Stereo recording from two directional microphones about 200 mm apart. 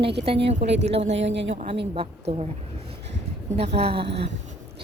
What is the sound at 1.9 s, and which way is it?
Speech, 30° right (ahead or behind).